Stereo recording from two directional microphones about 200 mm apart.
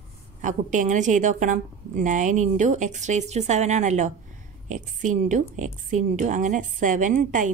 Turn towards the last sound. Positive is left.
turn(degrees=-40)  # may be behind; listen again after turning